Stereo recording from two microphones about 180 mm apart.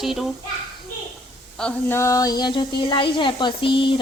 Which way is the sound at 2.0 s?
20° left (ahead or behind).